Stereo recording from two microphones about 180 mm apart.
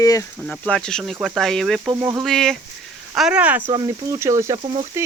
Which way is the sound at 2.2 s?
Centre (ahead or behind).